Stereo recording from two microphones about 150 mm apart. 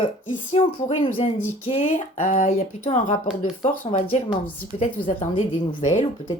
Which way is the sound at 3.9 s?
45° left (ahead or behind).